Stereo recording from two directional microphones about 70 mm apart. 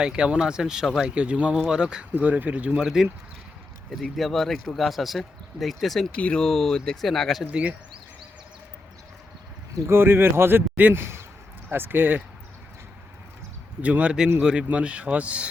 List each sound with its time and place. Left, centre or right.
0.0 s speech: centre
2.8 s speech: centre
3.9 s speech: centre
6.1 s speech: centre
7.5 s speech: centre
9.8 s speech: right
13.8 s speech: centre